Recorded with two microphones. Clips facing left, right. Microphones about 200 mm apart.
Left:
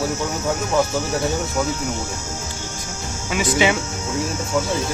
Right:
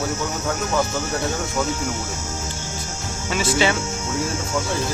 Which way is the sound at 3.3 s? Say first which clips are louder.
Left 1 dB; 15° left (ahead or behind).